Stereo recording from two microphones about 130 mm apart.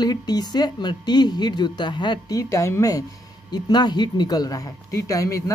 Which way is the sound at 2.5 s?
20° left (ahead or behind).